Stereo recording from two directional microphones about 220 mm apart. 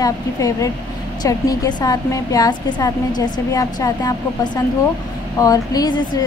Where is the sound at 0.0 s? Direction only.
15° left (ahead or behind).